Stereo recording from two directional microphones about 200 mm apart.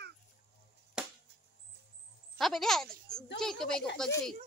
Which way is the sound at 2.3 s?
Centre (ahead or behind).